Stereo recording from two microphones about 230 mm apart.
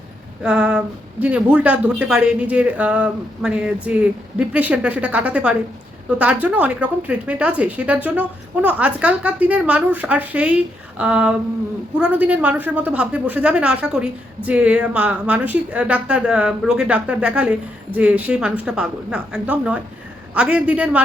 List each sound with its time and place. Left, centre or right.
0.4 s speech: centre